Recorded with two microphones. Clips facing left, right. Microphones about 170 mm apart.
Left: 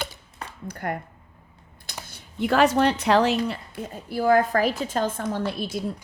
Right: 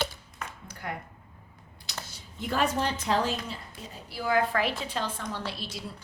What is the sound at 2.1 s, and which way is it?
A woman's voice, 70° left (ahead or behind).